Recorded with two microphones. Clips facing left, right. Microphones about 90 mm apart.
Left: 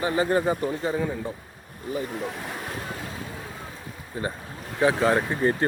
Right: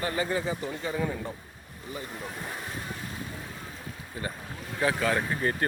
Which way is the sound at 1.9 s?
50° left (ahead or behind).